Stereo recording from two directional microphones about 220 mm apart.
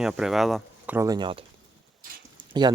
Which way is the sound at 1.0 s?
20° right (ahead or behind).